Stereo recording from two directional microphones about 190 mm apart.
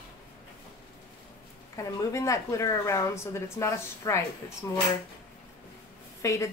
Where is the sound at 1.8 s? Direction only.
15° left (ahead or behind).